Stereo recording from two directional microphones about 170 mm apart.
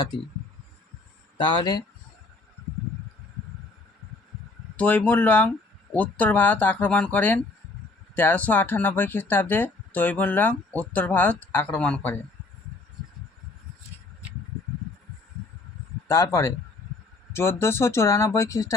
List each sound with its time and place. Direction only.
1.4 s speech: 25° left (ahead or behind)
4.8 s speech: 10° left (ahead or behind)
13.0 s heart sounds: centre (ahead or behind)
16.0 s speech: 20° left (ahead or behind)